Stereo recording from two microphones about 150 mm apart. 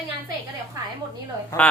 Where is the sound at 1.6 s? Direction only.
10° left (ahead or behind).